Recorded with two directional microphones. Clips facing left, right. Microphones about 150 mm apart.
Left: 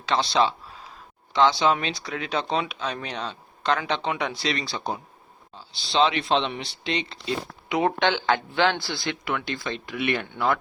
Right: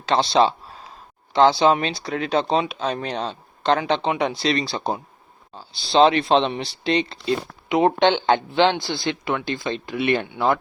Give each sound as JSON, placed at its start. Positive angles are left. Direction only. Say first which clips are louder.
{"t": 0.1, "sound": "speech", "louder": "right 4 dB", "side_deg": -30}
{"t": 5.5, "sound": "speech", "louder": "right 6 dB", "side_deg": -40}
{"t": 7.7, "sound": "speech", "louder": "right 5 dB", "side_deg": -25}